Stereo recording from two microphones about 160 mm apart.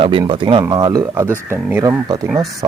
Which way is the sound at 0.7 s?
25° right (ahead or behind).